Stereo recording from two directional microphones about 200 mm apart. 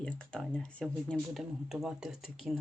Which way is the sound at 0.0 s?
5° left (ahead or behind).